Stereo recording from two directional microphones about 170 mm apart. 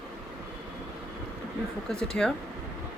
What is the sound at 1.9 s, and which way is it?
Speech, 5° left (ahead or behind).